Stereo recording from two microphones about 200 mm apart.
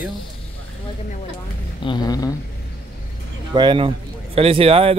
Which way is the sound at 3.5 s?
25° right (ahead or behind).